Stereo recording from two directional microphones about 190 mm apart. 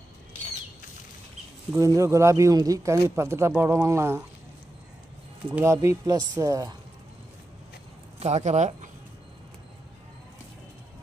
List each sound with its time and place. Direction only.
1.8 s speech: 15° right (ahead or behind)
5.5 s speech: 10° right (ahead or behind)
8.2 s speech: 35° right (ahead or behind)